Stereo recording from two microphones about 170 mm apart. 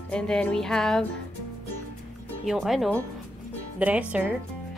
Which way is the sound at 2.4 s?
Centre (ahead or behind).